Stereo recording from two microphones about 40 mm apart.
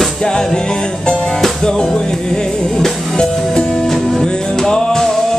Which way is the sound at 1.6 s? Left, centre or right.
Centre.